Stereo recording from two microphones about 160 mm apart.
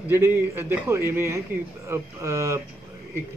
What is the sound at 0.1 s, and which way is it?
A man's voice, 15° right (ahead or behind).